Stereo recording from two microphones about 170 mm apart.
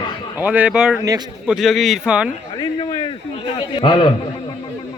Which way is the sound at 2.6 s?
25° left (ahead or behind).